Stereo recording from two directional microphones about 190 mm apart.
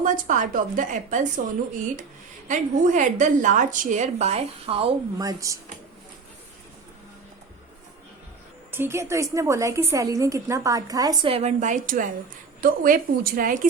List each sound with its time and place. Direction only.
0.0 s a woman's voice: 40° right (ahead or behind)
2.5 s a woman's voice: 40° right (ahead or behind)
5.1 s a woman's voice: 20° right (ahead or behind)
8.7 s a woman's voice: 15° right (ahead or behind); by 13.7 s 45° right (ahead or behind)